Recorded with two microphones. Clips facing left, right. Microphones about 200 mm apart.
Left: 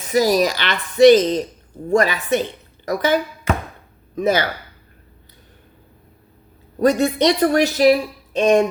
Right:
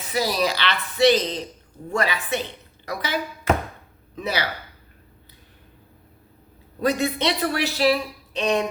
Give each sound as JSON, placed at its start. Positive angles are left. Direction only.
{"t": 0.1, "sound": "speech", "side_deg": 45}
{"t": 6.7, "sound": "speech", "side_deg": 45}